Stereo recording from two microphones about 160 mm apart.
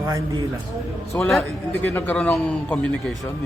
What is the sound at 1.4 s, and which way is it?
A man's voice, 15° left (ahead or behind).